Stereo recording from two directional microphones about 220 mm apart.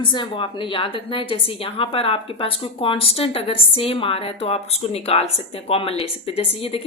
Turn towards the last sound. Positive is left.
turn(degrees=25)  # may be behind; listen again after turning